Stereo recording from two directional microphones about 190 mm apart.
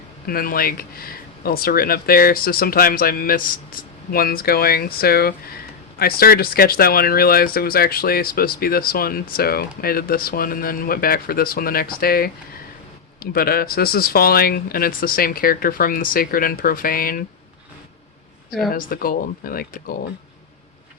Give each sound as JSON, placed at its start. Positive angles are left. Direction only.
{"t": 0.3, "sound": "speech", "side_deg": 50}
{"t": 13.3, "sound": "speech", "side_deg": 50}
{"t": 18.7, "sound": "speech", "side_deg": 50}